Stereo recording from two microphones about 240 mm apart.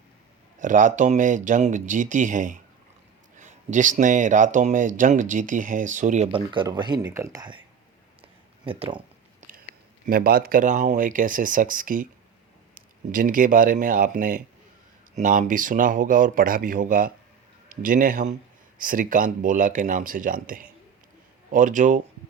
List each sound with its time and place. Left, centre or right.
0.6 s speech: right; by 7.6 s centre
8.6 s speech: right
10.1 s speech: right